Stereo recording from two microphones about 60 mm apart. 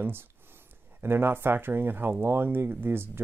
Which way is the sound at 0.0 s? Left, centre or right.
Right.